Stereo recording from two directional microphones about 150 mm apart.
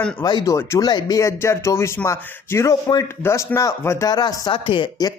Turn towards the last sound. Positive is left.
turn(degrees=30)  # may be behind; listen again after turning